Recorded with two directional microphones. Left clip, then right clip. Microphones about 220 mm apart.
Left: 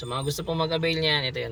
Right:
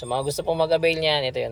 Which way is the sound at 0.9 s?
5° right (ahead or behind).